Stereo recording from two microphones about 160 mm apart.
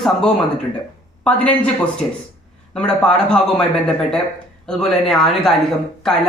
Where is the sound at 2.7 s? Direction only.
5° left (ahead or behind).